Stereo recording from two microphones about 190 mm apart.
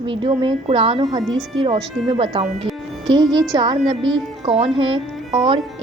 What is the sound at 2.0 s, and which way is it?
Speech, 30° right (ahead or behind).